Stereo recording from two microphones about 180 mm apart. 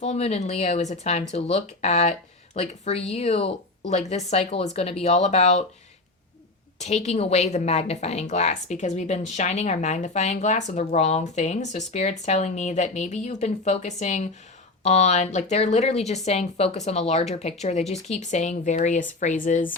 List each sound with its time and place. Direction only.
0.0 s a woman's voice: 35° left (ahead or behind)
6.7 s a woman's voice: 40° left (ahead or behind)